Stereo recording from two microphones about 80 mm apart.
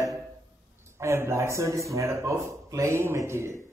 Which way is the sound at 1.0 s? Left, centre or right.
Right.